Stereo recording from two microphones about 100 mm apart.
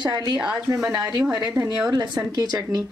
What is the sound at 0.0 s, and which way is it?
Speech, 45° right (ahead or behind).